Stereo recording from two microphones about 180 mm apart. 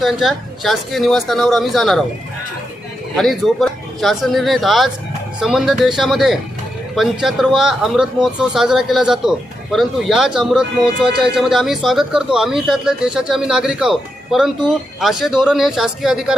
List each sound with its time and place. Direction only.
0.0 s a man's voice: centre (ahead or behind)
3.2 s a man's voice: centre (ahead or behind)